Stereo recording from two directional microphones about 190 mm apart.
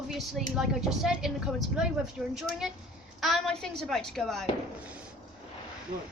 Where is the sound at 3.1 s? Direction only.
Centre (ahead or behind).